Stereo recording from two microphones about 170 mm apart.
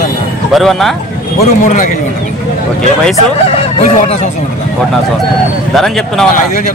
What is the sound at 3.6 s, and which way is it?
Speech, 35° left (ahead or behind).